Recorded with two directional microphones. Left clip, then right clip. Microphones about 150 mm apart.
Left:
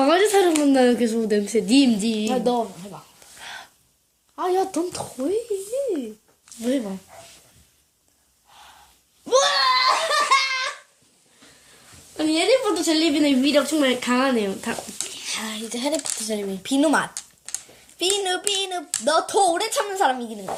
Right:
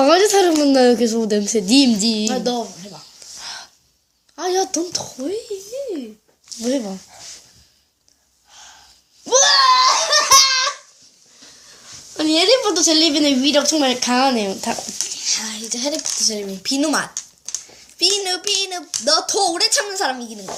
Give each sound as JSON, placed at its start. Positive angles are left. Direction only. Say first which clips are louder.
{"t": 0.0, "sound": "a woman's voice", "louder": "right 4 dB", "side_deg": -15}
{"t": 2.3, "sound": "a woman's voice", "louder": "even", "side_deg": 15}
{"t": 3.3, "sound": "crow", "louder": "right 4 dB", "side_deg": -25}
{"t": 4.4, "sound": "a woman's voice", "louder": "right 2 dB", "side_deg": 5}
{"t": 5.1, "sound": "speech", "louder": "left 1 dB", "side_deg": 30}
{"t": 6.6, "sound": "a woman's voice", "louder": "right 3 dB", "side_deg": -25}
{"t": 10.1, "sound": "laughter", "louder": "right 6 dB", "side_deg": -25}
{"t": 12.1, "sound": "a woman's voice", "louder": "right 4 dB", "side_deg": -35}
{"t": 15.1, "sound": "speech", "louder": "right 6 dB", "side_deg": 45}